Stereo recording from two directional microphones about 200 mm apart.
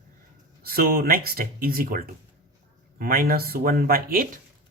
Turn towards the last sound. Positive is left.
turn(degrees=-45)  # may be behind; listen again after turning